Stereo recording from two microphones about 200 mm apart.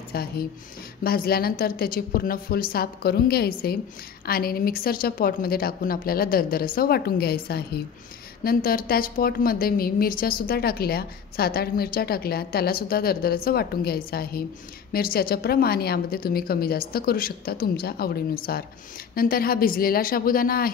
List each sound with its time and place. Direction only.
0.1 s a woman's voice: 50° left (ahead or behind)